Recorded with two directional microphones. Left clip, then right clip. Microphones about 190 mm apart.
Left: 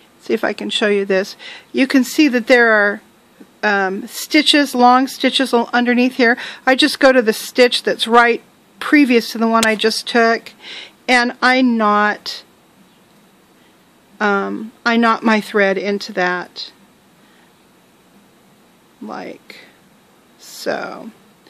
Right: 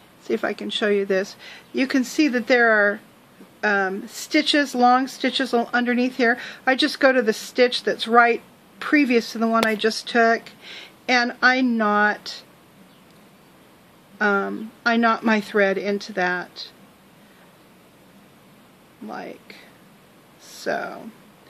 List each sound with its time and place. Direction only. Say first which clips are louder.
0.2 s speech: left 6 dB; 50° left (ahead or behind)
14.1 s speech: left 4 dB; 50° left (ahead or behind)
19.0 s speech: left 5 dB; 50° left (ahead or behind)